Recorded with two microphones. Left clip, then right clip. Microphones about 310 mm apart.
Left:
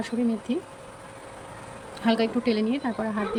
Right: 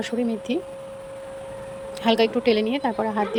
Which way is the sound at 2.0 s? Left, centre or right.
Centre.